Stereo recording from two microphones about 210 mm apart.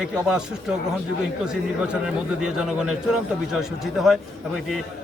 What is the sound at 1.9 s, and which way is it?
A man's voice, 5° right (ahead or behind).